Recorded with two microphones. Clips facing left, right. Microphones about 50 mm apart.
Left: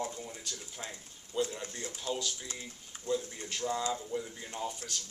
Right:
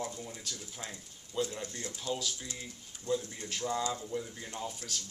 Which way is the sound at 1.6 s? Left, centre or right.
Left.